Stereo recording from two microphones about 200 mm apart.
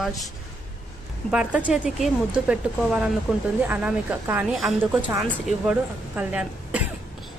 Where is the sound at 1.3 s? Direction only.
5° right (ahead or behind).